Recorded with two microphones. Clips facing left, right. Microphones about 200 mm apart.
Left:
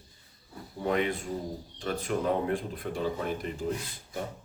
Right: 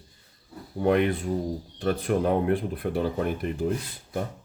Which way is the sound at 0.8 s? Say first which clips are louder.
Right 6 dB; 60° right (ahead or behind).